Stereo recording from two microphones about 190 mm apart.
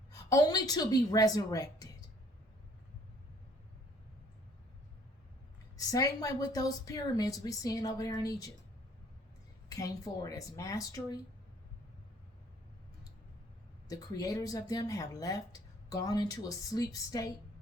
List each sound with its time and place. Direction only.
0.3 s speech: 20° left (ahead or behind)
5.7 s speech: 20° left (ahead or behind)
9.6 s speech: 20° left (ahead or behind)
13.8 s speech: 20° left (ahead or behind)